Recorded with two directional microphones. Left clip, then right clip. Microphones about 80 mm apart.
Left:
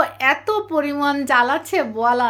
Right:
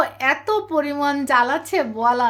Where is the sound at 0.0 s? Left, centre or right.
Left.